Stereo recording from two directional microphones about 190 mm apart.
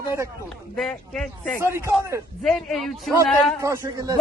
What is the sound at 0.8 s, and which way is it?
Speech, 5° left (ahead or behind).